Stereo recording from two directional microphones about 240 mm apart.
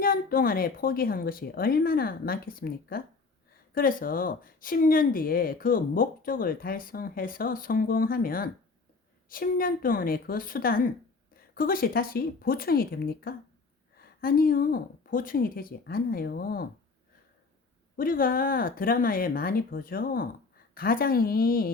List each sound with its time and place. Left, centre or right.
0.0 s speech: left
17.9 s speech: left